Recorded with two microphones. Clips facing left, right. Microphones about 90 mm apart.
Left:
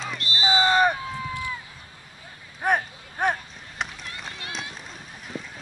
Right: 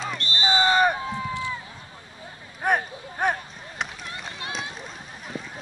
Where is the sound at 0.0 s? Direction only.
Centre (ahead or behind).